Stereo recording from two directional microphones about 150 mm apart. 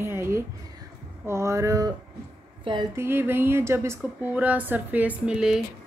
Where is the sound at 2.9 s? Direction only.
15° right (ahead or behind).